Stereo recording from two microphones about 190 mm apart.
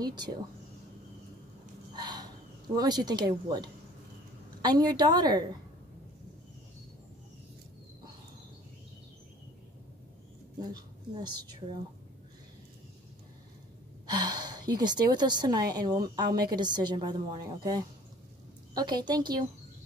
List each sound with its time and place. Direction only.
0.0 s speech: 20° right (ahead or behind)
2.0 s a sound: 20° right (ahead or behind)
2.7 s a woman's voice: 20° right (ahead or behind)
10.6 s a woman's voice: 20° right (ahead or behind)
14.1 s a woman's voice: 20° right (ahead or behind)